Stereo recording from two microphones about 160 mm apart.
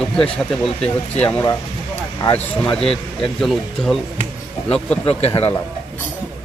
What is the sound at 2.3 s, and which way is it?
Speech, 10° left (ahead or behind).